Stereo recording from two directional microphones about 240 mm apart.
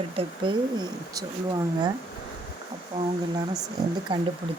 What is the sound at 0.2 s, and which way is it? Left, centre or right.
Speech, centre.